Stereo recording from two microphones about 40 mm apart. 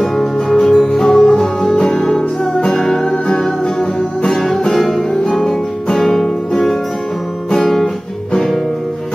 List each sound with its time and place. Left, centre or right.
0.0 s music: centre
7.5 s guitar: centre